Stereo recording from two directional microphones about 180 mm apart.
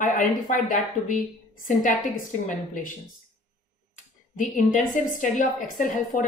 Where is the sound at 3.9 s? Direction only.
45° left (ahead or behind).